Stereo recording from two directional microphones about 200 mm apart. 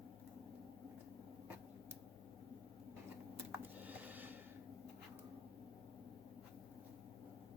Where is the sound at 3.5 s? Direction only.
10° right (ahead or behind).